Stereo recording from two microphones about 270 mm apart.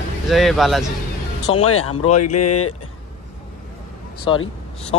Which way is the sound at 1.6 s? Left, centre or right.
Left.